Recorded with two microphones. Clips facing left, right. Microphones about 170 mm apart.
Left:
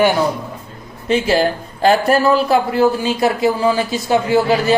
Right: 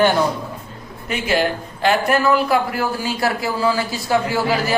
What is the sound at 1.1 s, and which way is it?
A man's voice, 30° left (ahead or behind).